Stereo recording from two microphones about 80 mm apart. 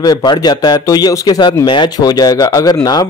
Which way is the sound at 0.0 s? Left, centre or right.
Left.